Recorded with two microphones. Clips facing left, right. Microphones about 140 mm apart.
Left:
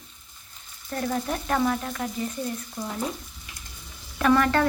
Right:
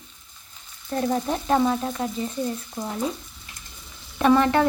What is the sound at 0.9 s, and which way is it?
A woman's voice, 25° right (ahead or behind).